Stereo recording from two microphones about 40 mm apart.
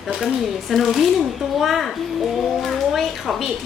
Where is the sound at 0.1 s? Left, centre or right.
Right.